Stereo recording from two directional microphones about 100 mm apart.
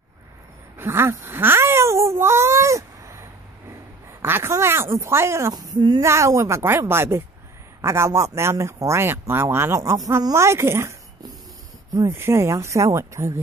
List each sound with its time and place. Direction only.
0.7 s speech: 25° right (ahead or behind)
5.5 s speech: 45° right (ahead or behind)
6.0 s speech: 30° right (ahead or behind)